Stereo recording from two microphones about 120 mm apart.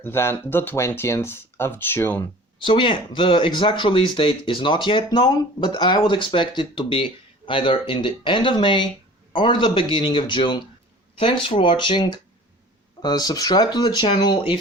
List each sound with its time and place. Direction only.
0.0 s speech: 20° left (ahead or behind)
2.6 s speech: 45° left (ahead or behind)